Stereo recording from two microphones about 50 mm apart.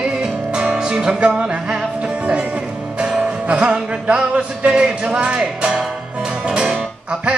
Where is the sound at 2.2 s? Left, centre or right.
Right.